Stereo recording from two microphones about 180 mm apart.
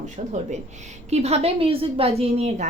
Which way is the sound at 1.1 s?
35° right (ahead or behind).